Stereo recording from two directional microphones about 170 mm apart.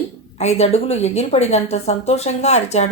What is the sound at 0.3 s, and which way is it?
A woman's voice, 40° left (ahead or behind).